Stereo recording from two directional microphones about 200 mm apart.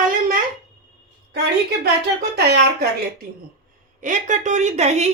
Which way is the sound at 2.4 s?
55° right (ahead or behind).